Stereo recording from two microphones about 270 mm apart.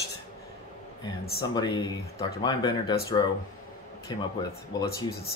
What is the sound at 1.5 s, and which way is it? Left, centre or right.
Speech, centre.